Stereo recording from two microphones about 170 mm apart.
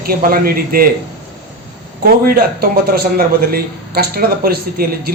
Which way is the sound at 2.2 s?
60° right (ahead or behind).